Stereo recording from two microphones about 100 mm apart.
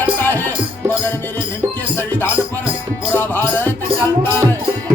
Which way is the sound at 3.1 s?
20° left (ahead or behind).